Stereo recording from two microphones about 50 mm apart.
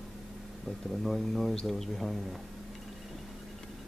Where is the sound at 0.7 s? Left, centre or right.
Centre.